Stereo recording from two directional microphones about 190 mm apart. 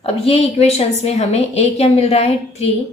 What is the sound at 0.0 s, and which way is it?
A woman's voice, 30° left (ahead or behind).